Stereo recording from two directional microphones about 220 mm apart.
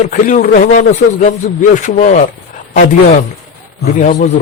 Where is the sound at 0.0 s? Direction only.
35° left (ahead or behind).